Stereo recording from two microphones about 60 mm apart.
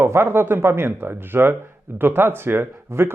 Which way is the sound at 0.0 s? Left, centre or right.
Right.